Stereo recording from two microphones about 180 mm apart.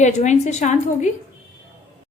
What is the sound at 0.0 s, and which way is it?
A woman's voice, 40° left (ahead or behind).